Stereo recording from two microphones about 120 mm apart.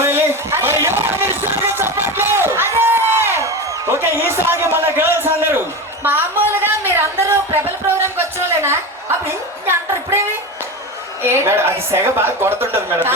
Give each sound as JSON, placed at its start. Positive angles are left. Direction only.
{"t": 0.0, "sound": "a sound", "side_deg": -20}
{"t": 2.7, "sound": "music", "side_deg": -20}
{"t": 11.2, "sound": "a woman's voice", "side_deg": -20}